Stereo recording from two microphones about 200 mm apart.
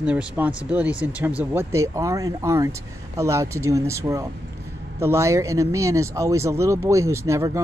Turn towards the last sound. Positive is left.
turn(degrees=-15)  # may be behind; listen again after turning